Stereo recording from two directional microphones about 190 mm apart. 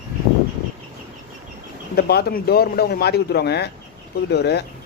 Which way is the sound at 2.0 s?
55° left (ahead or behind).